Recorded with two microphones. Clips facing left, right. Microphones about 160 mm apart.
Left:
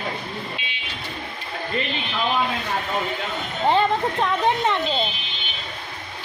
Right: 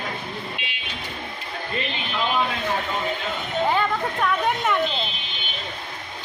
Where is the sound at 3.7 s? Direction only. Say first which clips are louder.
Left 7 dB; 25° left (ahead or behind).